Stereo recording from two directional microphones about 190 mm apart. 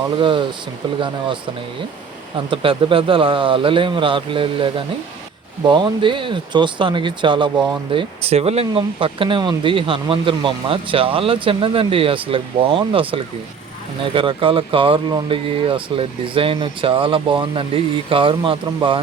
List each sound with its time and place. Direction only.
0.2 s speech: 25° right (ahead or behind)
2.5 s speech: 25° right (ahead or behind)